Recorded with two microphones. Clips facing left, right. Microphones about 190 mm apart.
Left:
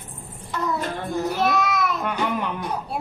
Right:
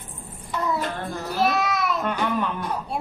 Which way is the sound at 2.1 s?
15° left (ahead or behind).